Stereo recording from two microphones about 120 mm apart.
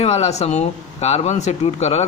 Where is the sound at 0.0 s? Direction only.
60° left (ahead or behind).